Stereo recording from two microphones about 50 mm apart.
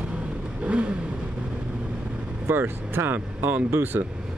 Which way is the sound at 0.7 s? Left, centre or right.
Right.